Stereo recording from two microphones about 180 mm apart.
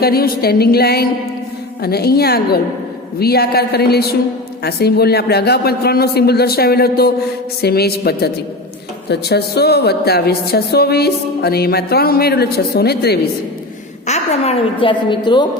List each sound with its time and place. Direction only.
0.0 s a woman's voice: 60° left (ahead or behind)
14.1 s a woman's voice: 30° left (ahead or behind)